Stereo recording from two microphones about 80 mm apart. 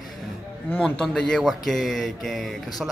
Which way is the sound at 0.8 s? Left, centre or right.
Centre.